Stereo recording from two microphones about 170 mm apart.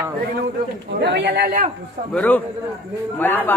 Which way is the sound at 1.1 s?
75° right (ahead or behind).